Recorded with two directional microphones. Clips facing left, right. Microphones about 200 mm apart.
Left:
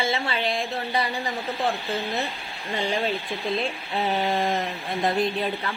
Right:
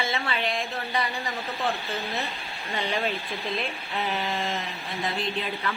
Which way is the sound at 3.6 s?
30° left (ahead or behind).